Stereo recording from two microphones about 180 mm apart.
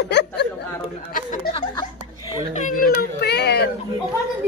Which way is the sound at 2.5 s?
45° left (ahead or behind).